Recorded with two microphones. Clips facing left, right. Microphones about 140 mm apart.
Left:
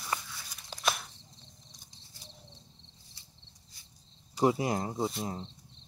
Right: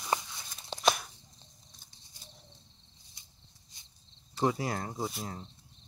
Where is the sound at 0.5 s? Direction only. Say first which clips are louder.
Right 5 dB; 25° right (ahead or behind).